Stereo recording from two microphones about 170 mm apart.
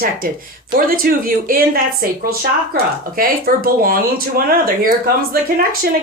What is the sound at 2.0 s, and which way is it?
Speech, 60° right (ahead or behind).